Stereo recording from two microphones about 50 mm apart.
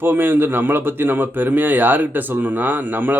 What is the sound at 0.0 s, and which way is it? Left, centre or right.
Speech, right.